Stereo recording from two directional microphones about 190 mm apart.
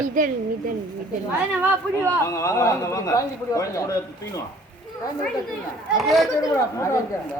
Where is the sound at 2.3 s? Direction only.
15° left (ahead or behind).